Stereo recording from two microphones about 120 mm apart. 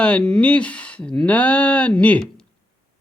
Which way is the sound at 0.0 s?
10° left (ahead or behind).